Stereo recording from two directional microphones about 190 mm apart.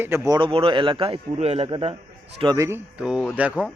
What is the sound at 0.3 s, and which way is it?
A man's voice, 25° right (ahead or behind).